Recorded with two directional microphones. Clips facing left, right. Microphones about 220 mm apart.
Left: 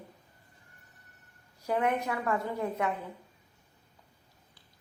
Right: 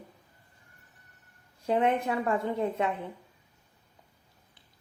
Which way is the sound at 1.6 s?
25° right (ahead or behind).